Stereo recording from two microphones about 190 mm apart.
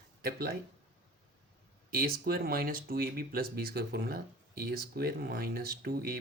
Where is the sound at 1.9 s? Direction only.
50° right (ahead or behind).